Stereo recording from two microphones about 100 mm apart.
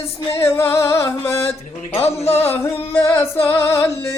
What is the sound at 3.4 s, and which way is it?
Music, 25° left (ahead or behind).